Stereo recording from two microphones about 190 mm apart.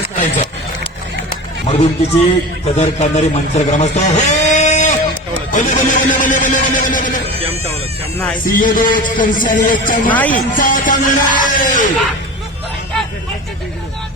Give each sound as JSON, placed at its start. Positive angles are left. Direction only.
{"t": 1.6, "sound": "speech", "side_deg": 35}
{"t": 7.3, "sound": "cat", "side_deg": -30}
{"t": 8.4, "sound": "speech", "side_deg": 45}
{"t": 10.1, "sound": "speech", "side_deg": 10}
{"t": 10.6, "sound": "speech", "side_deg": 45}